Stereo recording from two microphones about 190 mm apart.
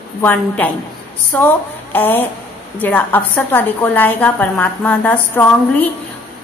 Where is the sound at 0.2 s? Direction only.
10° left (ahead or behind).